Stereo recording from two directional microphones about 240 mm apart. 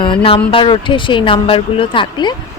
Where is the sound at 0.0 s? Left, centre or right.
Left.